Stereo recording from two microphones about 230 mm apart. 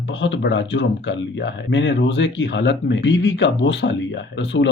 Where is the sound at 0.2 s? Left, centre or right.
Left.